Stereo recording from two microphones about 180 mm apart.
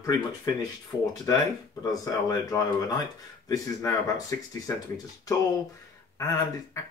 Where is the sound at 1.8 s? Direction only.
20° left (ahead or behind).